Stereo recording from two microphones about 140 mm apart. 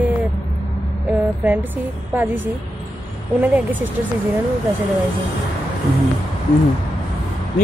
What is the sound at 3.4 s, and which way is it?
Speech, 10° right (ahead or behind).